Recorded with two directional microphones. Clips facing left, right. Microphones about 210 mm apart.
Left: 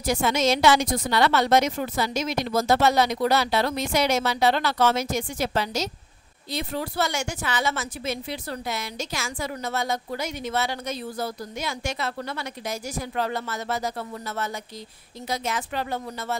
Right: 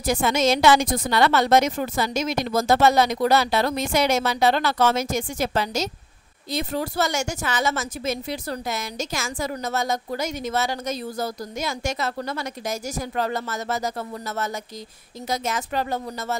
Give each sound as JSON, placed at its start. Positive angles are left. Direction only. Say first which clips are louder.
{"t": 0.0, "sound": "a woman's voice", "louder": "right 2 dB", "side_deg": -50}